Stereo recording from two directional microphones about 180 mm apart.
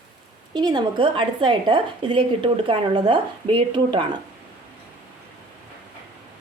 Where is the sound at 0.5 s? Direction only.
25° right (ahead or behind).